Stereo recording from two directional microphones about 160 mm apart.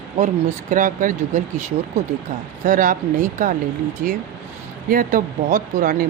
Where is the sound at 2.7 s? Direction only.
55° right (ahead or behind).